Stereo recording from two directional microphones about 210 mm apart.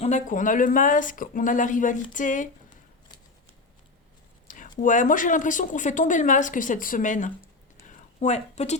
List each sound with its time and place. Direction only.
0.0 s speech: 35° left (ahead or behind)
4.4 s a sound: 40° left (ahead or behind)
4.8 s speech: 40° left (ahead or behind)